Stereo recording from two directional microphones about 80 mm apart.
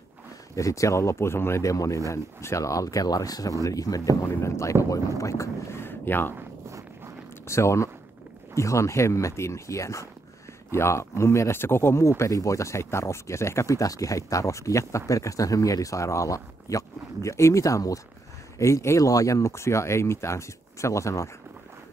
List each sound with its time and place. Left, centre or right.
0.6 s speech: left
7.4 s speech: left